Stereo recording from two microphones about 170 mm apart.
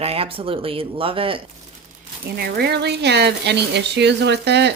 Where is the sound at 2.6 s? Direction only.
70° right (ahead or behind).